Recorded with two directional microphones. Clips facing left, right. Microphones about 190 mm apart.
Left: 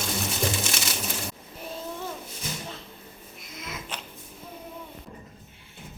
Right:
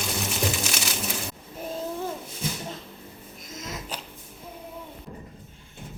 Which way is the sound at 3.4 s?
45° right (ahead or behind).